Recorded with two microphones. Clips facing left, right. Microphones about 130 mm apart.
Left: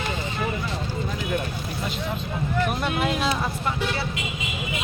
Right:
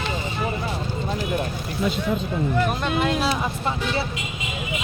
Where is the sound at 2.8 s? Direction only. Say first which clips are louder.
Right 2 dB; 5° left (ahead or behind).